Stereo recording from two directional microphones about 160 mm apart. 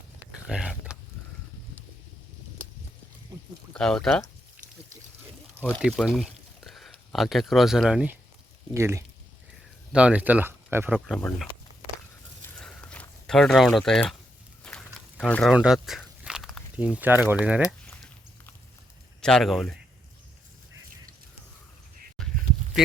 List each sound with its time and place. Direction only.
0.4 s a sound: 5° right (ahead or behind)
3.7 s speech: 5° left (ahead or behind)
5.6 s speech: 5° right (ahead or behind)
8.7 s speech: 15° right (ahead or behind)
10.9 s speech: centre (ahead or behind)
12.4 s a sound: 5° left (ahead or behind)
15.5 s walk: 5° right (ahead or behind)
19.2 s speech: centre (ahead or behind)
22.2 s a sound: centre (ahead or behind)